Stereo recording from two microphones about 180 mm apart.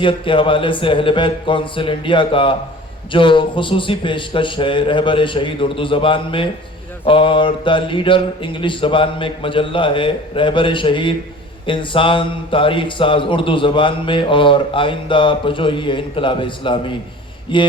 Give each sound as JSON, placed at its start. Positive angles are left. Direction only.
{"t": 0.0, "sound": "a man's voice", "side_deg": 30}